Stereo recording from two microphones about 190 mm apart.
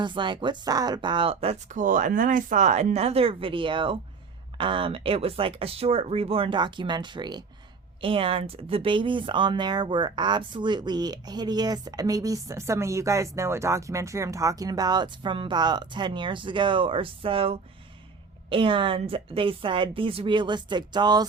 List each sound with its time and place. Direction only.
0.0 s speech: 25° right (ahead or behind)